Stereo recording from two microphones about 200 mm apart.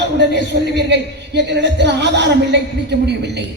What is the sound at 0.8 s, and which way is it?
A woman's voice, 60° right (ahead or behind).